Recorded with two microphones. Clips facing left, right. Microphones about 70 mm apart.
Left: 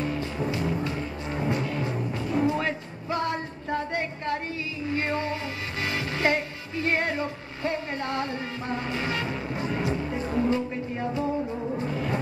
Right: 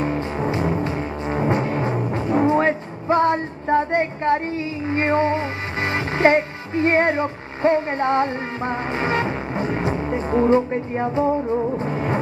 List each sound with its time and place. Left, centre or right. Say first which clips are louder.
0.0 s music: right 6 dB; right